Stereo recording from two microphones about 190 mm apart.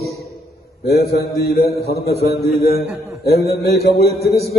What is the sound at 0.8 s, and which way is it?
A man's voice, 55° left (ahead or behind).